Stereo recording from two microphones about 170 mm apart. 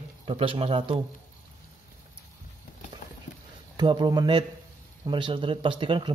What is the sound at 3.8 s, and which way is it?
Speech, 25° right (ahead or behind).